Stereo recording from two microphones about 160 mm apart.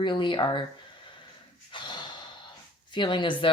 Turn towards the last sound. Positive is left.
turn(degrees=30)  # may be behind; listen again after turning